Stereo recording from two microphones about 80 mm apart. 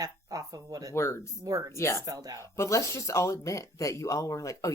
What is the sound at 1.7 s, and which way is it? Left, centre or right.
Speech, left.